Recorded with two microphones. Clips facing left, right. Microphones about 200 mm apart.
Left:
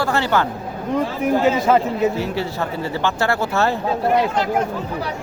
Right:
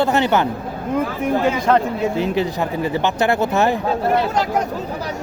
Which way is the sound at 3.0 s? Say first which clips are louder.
Right 1 dB; 20° right (ahead or behind).